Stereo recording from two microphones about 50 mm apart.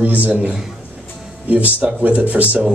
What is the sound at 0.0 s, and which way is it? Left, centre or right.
Speech, right.